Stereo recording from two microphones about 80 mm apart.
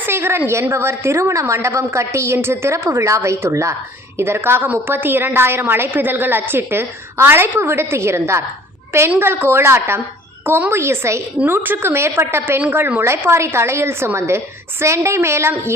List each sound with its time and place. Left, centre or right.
0.0 s a woman's voice: right